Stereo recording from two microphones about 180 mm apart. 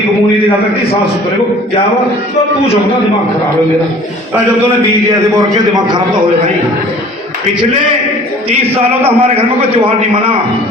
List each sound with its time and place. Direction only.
5.7 s a man's voice: 25° right (ahead or behind)
9.0 s a man's voice: 35° right (ahead or behind)